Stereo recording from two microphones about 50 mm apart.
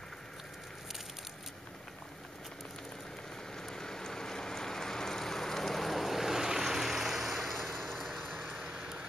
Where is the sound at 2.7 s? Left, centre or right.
Centre.